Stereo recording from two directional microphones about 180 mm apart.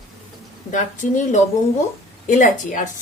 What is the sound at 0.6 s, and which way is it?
Speech, 45° left (ahead or behind).